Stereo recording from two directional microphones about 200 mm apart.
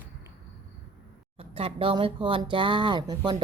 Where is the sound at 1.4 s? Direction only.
30° right (ahead or behind).